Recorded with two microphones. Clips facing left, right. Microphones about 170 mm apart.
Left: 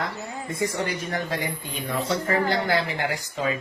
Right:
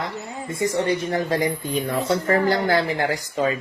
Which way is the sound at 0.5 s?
30° right (ahead or behind).